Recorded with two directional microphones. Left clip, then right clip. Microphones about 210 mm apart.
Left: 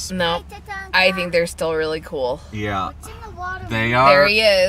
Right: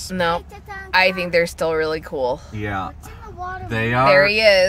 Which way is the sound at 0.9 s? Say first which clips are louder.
Even; centre (ahead or behind).